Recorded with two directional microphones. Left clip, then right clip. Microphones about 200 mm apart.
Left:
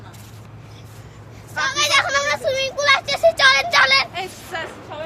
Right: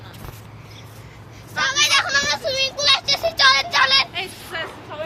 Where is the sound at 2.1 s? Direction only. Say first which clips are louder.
Left 1 dB; 25° left (ahead or behind).